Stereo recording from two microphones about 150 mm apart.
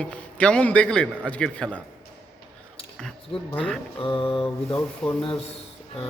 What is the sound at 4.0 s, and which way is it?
Speech, 35° left (ahead or behind).